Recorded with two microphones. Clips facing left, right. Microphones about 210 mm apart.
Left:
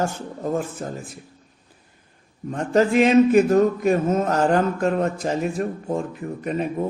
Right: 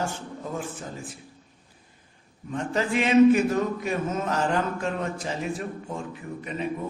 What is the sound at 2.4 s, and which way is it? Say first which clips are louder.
Speech: left 8 dB; 45° left (ahead or behind).